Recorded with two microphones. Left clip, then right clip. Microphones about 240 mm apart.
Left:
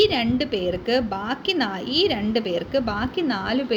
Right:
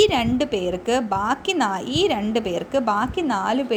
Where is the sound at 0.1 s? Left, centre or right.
Right.